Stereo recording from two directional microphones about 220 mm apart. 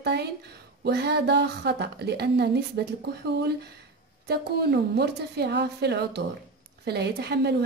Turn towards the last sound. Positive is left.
turn(degrees=-50)  # may be behind; listen again after turning